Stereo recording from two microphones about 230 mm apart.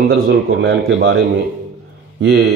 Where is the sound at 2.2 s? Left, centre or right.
Right.